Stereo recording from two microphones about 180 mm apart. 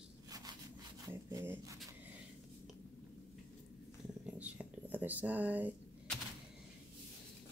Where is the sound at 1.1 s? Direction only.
15° right (ahead or behind).